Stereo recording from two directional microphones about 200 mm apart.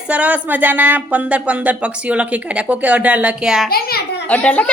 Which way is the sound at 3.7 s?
50° left (ahead or behind).